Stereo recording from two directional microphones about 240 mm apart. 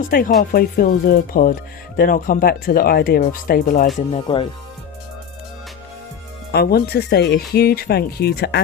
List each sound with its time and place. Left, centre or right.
0.1 s speech: left
3.9 s speech: left
6.5 s speech: left